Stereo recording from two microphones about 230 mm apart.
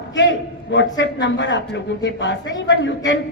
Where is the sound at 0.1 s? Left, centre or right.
Left.